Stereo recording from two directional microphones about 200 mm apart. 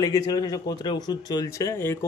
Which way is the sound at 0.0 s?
20° left (ahead or behind).